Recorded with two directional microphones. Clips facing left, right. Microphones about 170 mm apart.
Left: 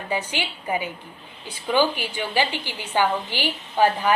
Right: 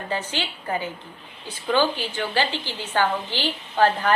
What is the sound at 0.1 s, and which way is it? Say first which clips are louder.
A woman's voice: left 2 dB; 15° left (ahead or behind).